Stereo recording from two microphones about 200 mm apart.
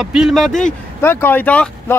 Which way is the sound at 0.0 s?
5° right (ahead or behind).